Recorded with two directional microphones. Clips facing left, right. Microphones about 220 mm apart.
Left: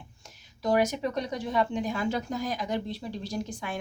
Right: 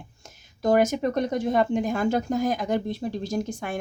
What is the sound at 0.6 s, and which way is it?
Speech, 50° right (ahead or behind).